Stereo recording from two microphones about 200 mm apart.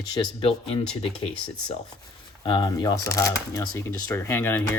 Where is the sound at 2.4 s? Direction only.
20° left (ahead or behind).